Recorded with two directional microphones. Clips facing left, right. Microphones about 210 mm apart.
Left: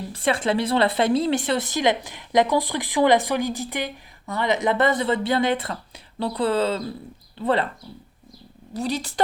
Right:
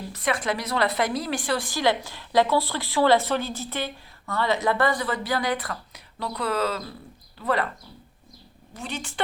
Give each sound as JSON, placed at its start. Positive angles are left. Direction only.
{"t": 0.1, "sound": "a woman's voice", "side_deg": 30}
{"t": 8.7, "sound": "a woman's voice", "side_deg": 35}